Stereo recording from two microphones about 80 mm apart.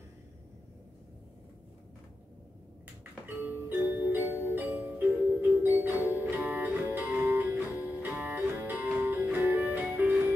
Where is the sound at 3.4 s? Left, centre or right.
Right.